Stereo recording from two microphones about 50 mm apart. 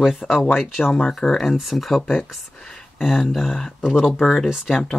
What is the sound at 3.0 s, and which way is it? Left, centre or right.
Speech, centre.